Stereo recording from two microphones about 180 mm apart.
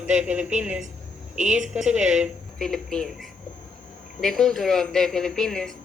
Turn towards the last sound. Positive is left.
turn(degrees=0)  # may be behind; listen again after turning